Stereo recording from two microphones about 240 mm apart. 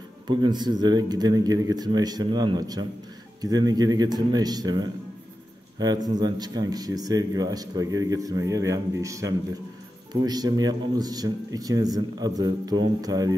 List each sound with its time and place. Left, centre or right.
0.3 s speech: centre